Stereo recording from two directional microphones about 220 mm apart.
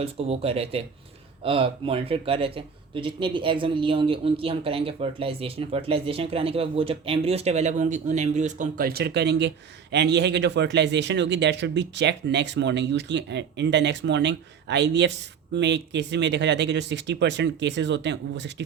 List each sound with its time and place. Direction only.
0.0 s speech: 25° right (ahead or behind); by 18.6 s 55° right (ahead or behind)